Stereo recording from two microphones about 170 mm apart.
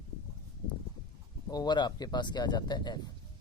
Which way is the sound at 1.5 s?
25° left (ahead or behind).